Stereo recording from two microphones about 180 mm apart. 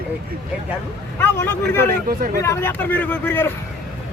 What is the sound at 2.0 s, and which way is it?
Speech, 55° right (ahead or behind).